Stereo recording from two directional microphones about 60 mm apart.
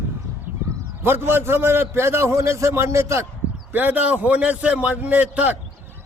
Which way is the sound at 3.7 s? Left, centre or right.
Right.